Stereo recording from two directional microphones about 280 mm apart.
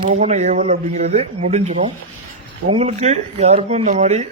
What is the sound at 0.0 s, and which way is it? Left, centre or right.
Speech, right.